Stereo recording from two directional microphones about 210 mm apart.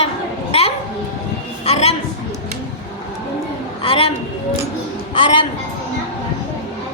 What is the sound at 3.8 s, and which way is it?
Speech, 25° left (ahead or behind).